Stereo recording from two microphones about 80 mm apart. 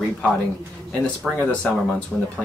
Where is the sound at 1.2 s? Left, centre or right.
Centre.